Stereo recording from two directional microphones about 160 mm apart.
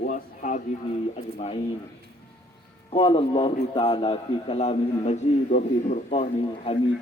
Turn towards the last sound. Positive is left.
turn(degrees=45)  # may be behind; listen again after turning